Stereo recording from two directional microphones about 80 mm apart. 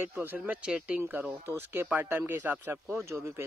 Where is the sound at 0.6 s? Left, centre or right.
Centre.